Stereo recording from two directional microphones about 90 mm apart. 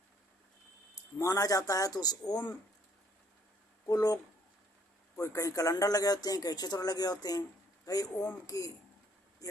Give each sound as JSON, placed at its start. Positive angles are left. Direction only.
{"t": 1.2, "sound": "a man's voice", "side_deg": 40}
{"t": 3.8, "sound": "a man's voice", "side_deg": 45}